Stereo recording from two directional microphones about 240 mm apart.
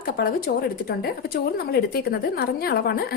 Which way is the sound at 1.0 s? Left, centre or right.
Left.